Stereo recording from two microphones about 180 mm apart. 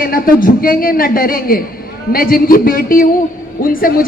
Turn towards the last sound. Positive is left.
turn(degrees=50)  # may be behind; listen again after turning